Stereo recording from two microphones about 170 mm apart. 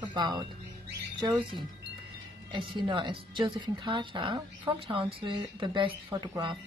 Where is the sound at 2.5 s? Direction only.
30° right (ahead or behind).